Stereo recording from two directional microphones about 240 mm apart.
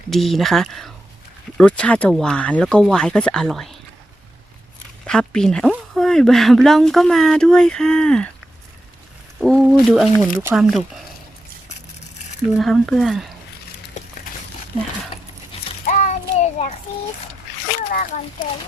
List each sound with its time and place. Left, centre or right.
0.1 s a woman's voice: centre
5.0 s a woman's voice: centre
9.4 s a woman's voice: centre
12.5 s a woman's voice: centre
15.9 s child singing: left
17.9 s speech: left